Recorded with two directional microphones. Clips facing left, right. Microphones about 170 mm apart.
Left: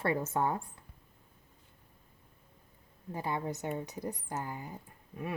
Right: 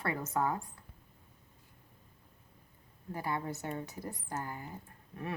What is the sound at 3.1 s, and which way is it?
A woman's voice, 20° left (ahead or behind).